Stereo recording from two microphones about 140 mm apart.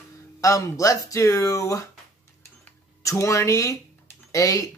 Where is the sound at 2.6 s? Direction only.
20° left (ahead or behind).